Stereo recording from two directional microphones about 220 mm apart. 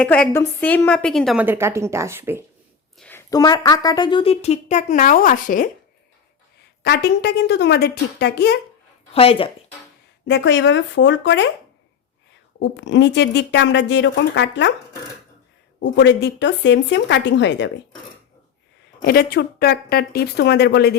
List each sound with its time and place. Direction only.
0.0 s a woman's voice: 5° left (ahead or behind); by 2.4 s 10° right (ahead or behind)
3.0 s a woman's voice: 10° left (ahead or behind); by 5.7 s 40° left (ahead or behind)
6.8 s speech: 50° left (ahead or behind)
9.1 s a woman's voice: 25° left (ahead or behind)
10.2 s speech: 55° left (ahead or behind)
12.5 s speech: 55° left (ahead or behind)
15.8 s speech: 55° left (ahead or behind)
19.0 s speech: 45° left (ahead or behind)